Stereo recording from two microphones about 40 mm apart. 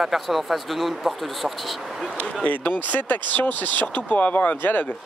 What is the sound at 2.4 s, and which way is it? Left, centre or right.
Speech, left.